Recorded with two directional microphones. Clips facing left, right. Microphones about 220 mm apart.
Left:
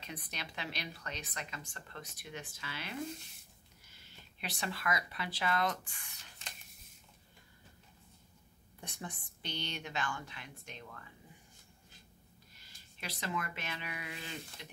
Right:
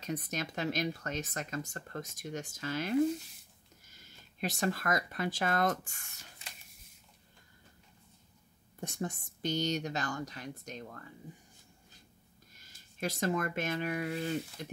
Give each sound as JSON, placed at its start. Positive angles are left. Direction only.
{"t": 0.0, "sound": "speech", "side_deg": -45}
{"t": 3.9, "sound": "speech", "side_deg": -45}
{"t": 8.8, "sound": "speech", "side_deg": -45}
{"t": 12.5, "sound": "speech", "side_deg": -45}